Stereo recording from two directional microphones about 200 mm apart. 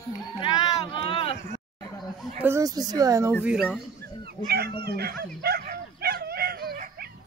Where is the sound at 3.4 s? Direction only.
Centre (ahead or behind).